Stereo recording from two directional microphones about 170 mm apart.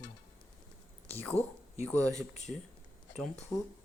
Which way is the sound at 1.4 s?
40° left (ahead or behind).